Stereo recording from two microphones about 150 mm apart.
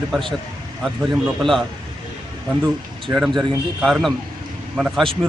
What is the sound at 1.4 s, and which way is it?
Speech, centre (ahead or behind).